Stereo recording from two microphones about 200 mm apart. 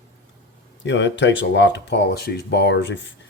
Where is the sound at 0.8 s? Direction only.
65° left (ahead or behind).